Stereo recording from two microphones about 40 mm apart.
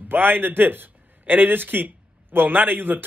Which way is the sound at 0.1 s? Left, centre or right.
Right.